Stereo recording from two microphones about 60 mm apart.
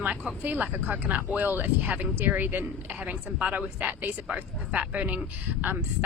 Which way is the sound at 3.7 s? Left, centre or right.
Right.